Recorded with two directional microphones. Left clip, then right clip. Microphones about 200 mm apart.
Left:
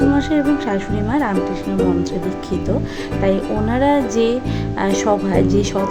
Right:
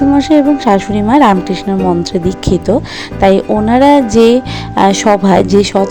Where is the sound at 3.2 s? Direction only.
35° right (ahead or behind).